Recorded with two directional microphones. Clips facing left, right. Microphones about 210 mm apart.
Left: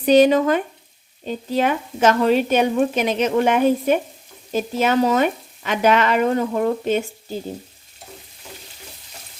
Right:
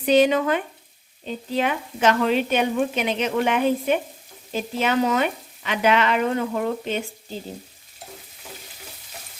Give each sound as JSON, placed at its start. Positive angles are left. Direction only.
{"t": 0.0, "sound": "speech", "side_deg": 40}